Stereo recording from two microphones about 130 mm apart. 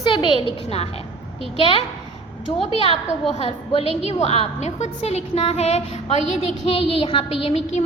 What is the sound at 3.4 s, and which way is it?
A woman's voice, 50° left (ahead or behind).